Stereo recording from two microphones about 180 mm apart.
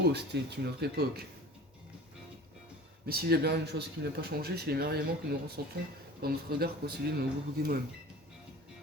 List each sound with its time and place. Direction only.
0.0 s speech: 65° right (ahead or behind)
3.1 s speech: 60° right (ahead or behind)